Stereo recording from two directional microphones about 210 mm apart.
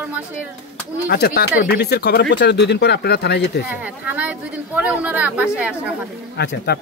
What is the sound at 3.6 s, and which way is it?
A woman's voice, 5° right (ahead or behind).